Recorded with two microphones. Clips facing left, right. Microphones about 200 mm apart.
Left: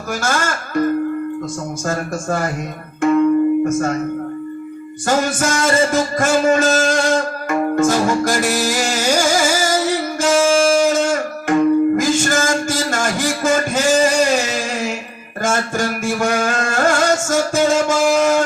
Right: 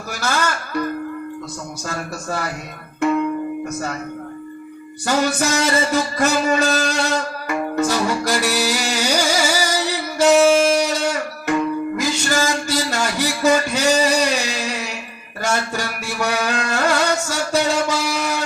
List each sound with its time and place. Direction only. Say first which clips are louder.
0.1 s speech: left 2 dB; 50° left (ahead or behind)
1.9 s a man's voice: left 6 dB; 50° left (ahead or behind)
3.0 s music: left 5 dB; 45° left (ahead or behind)
3.7 s a man's voice: left 8 dB; 50° left (ahead or behind)
5.0 s music: left 1 dB; 45° left (ahead or behind)